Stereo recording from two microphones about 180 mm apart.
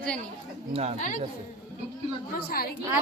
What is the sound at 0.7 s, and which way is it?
Speech, 35° right (ahead or behind).